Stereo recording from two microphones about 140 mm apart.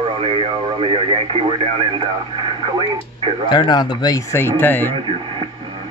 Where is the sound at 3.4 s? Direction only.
35° left (ahead or behind); by 4.9 s 15° left (ahead or behind).